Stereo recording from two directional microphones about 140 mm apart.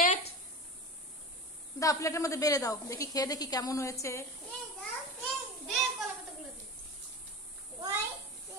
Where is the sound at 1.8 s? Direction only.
25° left (ahead or behind).